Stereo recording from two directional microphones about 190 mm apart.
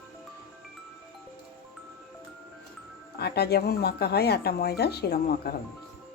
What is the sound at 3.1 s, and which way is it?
Speech, 55° left (ahead or behind).